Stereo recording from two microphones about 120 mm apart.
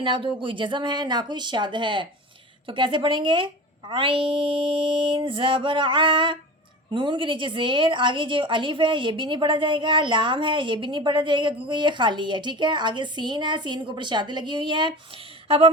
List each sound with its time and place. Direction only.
0.0 s a woman's voice: 45° right (ahead or behind)